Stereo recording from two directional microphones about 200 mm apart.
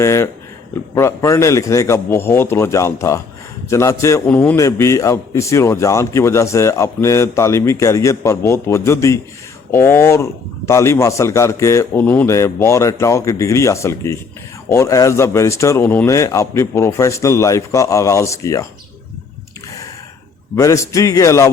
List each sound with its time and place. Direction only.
0.0 s a man's voice: 15° left (ahead or behind)
20.6 s a man's voice: 15° left (ahead or behind)